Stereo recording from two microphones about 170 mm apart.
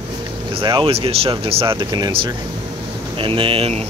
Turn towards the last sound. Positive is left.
turn(degrees=-35)  # may be behind; listen again after turning